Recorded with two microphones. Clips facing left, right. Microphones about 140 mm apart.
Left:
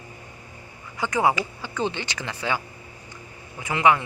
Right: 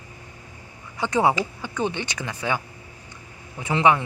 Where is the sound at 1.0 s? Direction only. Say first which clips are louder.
Right 2 dB; 25° right (ahead or behind).